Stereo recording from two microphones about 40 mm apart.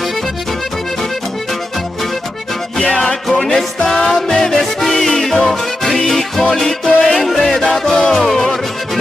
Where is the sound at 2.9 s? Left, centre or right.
Centre.